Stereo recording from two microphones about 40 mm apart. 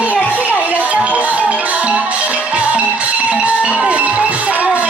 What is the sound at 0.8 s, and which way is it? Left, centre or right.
Music, right.